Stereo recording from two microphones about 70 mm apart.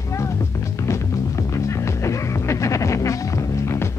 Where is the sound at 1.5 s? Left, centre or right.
Left.